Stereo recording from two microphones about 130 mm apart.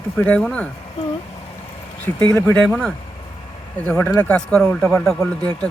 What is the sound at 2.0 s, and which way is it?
Speech, 10° left (ahead or behind).